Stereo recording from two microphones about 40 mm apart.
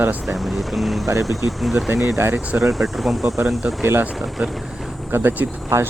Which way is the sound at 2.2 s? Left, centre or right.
Right.